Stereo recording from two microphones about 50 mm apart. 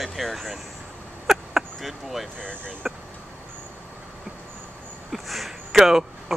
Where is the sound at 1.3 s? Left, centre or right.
Centre.